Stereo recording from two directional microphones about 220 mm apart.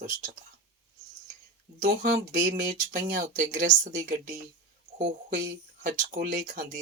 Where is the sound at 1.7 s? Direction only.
35° right (ahead or behind).